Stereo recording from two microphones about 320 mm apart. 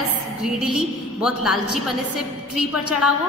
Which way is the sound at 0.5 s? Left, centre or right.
Left.